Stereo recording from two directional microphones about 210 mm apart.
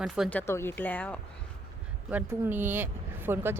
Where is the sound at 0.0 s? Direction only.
5° left (ahead or behind).